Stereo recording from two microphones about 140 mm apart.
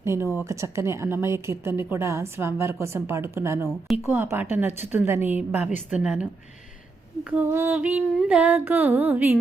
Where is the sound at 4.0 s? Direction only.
15° right (ahead or behind).